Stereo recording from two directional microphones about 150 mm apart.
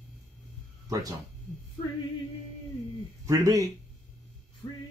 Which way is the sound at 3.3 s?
20° right (ahead or behind).